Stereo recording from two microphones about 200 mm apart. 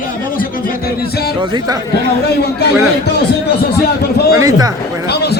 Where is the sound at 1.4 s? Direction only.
20° right (ahead or behind).